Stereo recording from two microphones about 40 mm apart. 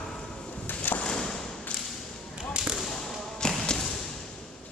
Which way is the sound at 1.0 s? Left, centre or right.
Centre.